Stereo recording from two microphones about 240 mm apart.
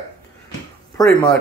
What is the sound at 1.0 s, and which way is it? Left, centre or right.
Speech, centre.